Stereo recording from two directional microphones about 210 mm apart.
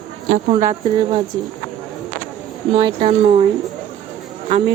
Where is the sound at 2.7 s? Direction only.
20° right (ahead or behind).